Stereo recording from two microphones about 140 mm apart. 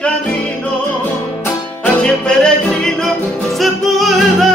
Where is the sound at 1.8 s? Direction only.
5° left (ahead or behind).